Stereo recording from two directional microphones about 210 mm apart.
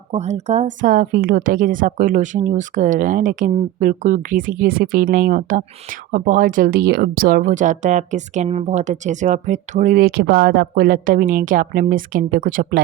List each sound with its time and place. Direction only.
0.1 s a woman's voice: 30° right (ahead or behind)